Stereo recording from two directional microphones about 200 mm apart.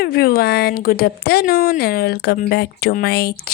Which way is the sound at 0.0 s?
50° left (ahead or behind).